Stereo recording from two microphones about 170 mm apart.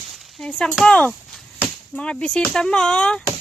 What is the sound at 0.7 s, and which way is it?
Speech, 5° left (ahead or behind).